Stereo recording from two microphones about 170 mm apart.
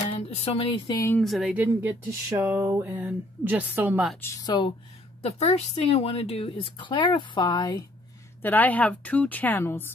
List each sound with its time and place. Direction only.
0.0 s speech: 35° left (ahead or behind)
0.9 s a woman's voice: 15° left (ahead or behind)
1.2 s speech: 5° right (ahead or behind)
4.2 s speech: 20° left (ahead or behind)
5.2 s a woman's voice: 40° left (ahead or behind); by 7.8 s 25° left (ahead or behind)
8.4 s a woman's voice: 10° left (ahead or behind)